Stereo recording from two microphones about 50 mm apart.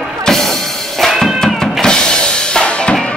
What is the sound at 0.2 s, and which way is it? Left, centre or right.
Music, centre.